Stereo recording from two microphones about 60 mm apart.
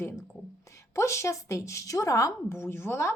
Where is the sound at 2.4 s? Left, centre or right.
Left.